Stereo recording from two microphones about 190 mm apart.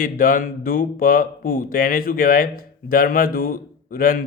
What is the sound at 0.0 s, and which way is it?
A man's voice, 45° left (ahead or behind).